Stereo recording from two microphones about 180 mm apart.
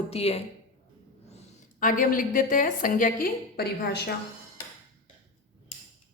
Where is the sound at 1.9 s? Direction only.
50° left (ahead or behind).